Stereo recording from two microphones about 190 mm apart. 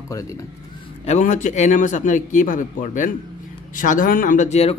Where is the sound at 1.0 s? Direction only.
40° left (ahead or behind).